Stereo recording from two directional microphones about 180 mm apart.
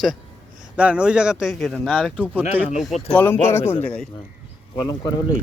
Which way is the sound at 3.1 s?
10° left (ahead or behind).